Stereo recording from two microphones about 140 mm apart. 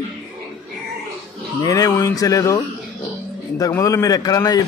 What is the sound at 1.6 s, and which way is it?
A man's voice, 25° left (ahead or behind).